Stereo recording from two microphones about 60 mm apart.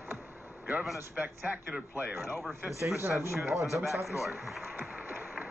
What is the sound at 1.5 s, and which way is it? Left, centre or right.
Speech, right.